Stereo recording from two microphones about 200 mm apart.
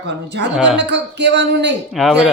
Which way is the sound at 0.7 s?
60° right (ahead or behind).